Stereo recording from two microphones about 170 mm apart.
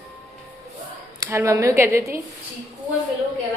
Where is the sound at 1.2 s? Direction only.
15° right (ahead or behind).